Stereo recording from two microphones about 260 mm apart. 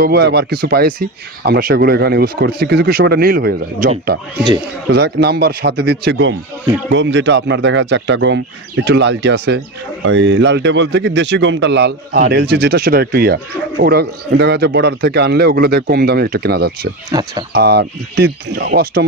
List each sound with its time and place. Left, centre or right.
0.0 s speech: right
17.1 s speech: centre
17.5 s speech: right